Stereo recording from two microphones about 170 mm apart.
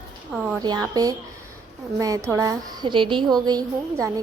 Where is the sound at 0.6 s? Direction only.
25° right (ahead or behind).